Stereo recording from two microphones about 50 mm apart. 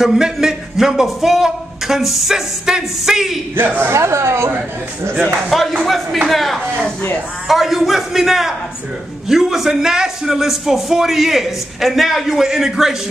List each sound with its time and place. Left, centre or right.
0.0 s a man's voice: centre
3.5 s a woman's voice: right
3.9 s speech: right
5.5 s a man's voice: centre